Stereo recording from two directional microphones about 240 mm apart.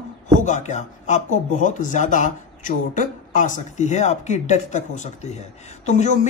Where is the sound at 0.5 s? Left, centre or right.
Left.